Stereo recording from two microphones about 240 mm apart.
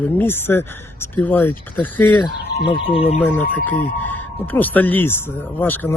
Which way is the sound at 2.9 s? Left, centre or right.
Left.